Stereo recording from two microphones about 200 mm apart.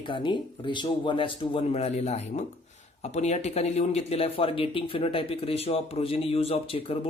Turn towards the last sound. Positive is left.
turn(degrees=30)  # may be behind; listen again after turning